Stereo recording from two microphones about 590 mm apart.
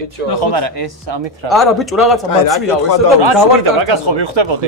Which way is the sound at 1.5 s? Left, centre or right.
Centre.